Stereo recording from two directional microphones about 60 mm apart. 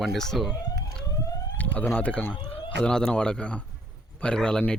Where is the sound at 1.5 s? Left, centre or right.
Left.